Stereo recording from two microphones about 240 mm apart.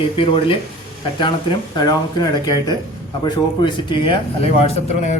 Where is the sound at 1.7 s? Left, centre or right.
Centre.